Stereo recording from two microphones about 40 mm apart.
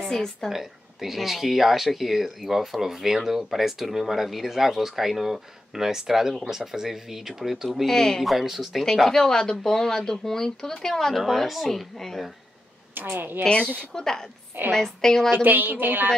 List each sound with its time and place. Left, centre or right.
0.0 s a woman's voice: centre
0.5 s speech: centre
7.8 s speech: centre
8.2 s speech: centre
8.9 s speech: centre
12.9 s a woman's voice: right
13.5 s speech: left
13.9 s speech: centre
15.3 s a woman's voice: right